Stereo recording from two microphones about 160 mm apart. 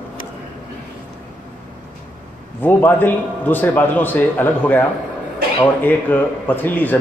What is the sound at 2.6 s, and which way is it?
A man's voice, 10° left (ahead or behind).